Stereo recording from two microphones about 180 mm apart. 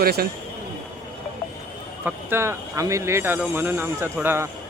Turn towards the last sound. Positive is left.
turn(degrees=-10)  # may be behind; listen again after turning